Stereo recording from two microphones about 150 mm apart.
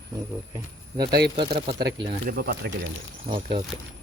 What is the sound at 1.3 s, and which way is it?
Speech, 35° right (ahead or behind).